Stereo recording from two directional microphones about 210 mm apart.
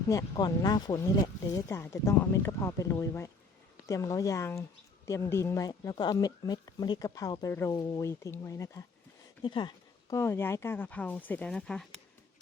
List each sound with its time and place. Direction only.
0.1 s speech: 15° left (ahead or behind)